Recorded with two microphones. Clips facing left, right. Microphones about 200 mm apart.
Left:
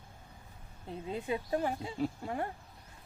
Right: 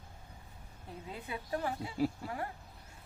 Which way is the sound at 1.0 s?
25° left (ahead or behind).